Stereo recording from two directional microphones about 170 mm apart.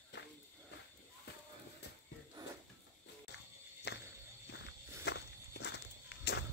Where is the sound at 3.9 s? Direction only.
75° left (ahead or behind).